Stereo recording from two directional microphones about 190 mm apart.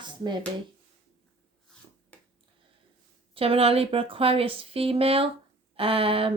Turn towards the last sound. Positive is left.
turn(degrees=-30)  # may be behind; listen again after turning